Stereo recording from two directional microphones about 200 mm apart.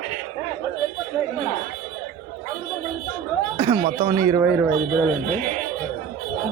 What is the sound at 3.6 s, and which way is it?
Speech, 30° right (ahead or behind).